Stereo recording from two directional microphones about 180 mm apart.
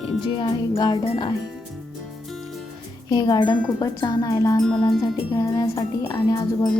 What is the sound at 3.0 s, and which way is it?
Speech, 20° left (ahead or behind).